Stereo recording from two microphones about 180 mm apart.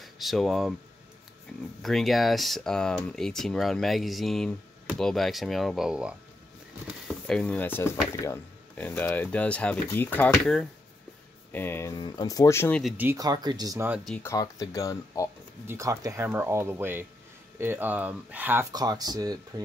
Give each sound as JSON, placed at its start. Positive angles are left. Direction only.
{"t": 0.0, "sound": "speech", "side_deg": 0}
{"t": 1.8, "sound": "speech", "side_deg": 0}
{"t": 12.8, "sound": "speech", "side_deg": -10}
{"t": 14.2, "sound": "speech", "side_deg": 20}
{"t": 15.6, "sound": "speech", "side_deg": -15}